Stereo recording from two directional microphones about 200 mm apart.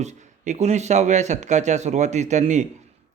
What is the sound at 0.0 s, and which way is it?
Speech, 35° right (ahead or behind).